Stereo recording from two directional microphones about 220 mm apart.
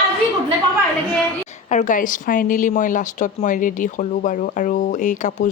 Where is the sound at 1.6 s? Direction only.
35° left (ahead or behind).